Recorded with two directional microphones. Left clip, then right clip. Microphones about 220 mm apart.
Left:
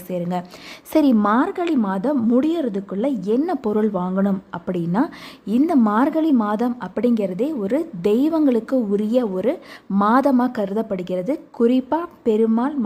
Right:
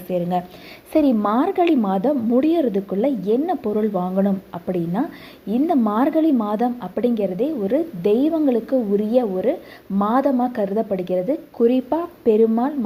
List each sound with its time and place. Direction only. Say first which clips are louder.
0.1 s a woman's voice: right 3 dB; 5° left (ahead or behind)